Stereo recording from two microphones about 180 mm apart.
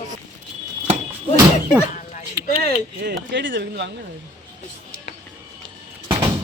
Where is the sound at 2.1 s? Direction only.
35° left (ahead or behind).